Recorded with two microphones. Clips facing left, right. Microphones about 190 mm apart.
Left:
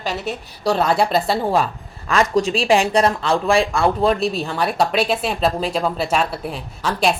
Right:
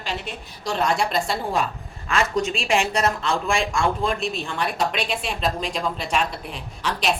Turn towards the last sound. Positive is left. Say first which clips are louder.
# left 4 dB
turn(degrees=40)  # may be behind; listen again after turning